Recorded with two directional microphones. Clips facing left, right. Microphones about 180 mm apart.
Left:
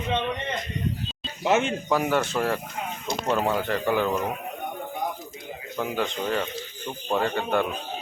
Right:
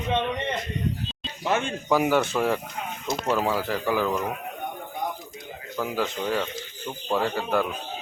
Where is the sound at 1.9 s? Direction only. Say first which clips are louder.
Right 3 dB; centre (ahead or behind).